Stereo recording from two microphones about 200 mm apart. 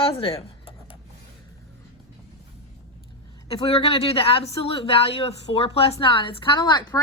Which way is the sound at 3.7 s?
30° left (ahead or behind).